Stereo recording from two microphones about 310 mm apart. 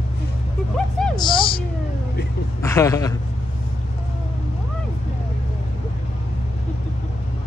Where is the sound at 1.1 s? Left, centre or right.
Centre.